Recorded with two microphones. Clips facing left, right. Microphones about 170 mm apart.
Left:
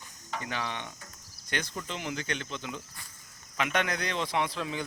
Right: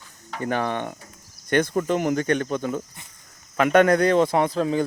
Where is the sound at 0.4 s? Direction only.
50° right (ahead or behind).